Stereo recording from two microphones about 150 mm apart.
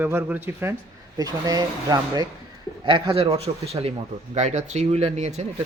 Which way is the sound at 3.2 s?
40° right (ahead or behind).